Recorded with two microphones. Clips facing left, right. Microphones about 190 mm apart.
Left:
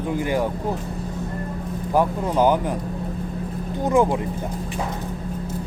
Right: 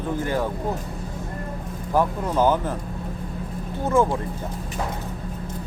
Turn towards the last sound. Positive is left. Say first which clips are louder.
# left 2 dB
turn(degrees=15)  # may be behind; listen again after turning